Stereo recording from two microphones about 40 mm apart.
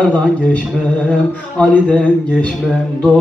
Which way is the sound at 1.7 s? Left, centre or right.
Left.